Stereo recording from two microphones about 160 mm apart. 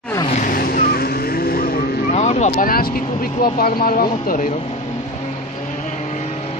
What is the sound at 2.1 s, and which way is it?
Speech, 45° left (ahead or behind).